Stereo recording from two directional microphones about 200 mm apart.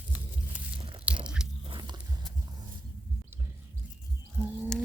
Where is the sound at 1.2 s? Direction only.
5° right (ahead or behind).